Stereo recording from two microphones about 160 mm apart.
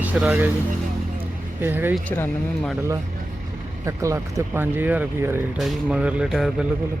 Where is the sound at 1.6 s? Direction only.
15° right (ahead or behind).